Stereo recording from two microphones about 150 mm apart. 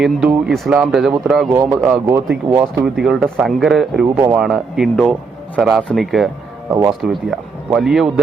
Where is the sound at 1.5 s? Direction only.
15° right (ahead or behind).